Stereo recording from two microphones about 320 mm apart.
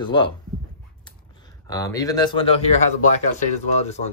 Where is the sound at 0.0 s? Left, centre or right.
Centre.